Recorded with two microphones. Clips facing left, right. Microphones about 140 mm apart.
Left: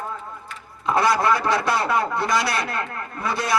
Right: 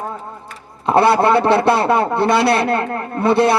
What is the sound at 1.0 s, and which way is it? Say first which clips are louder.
A man's voice: right 7 dB; 30° right (ahead or behind).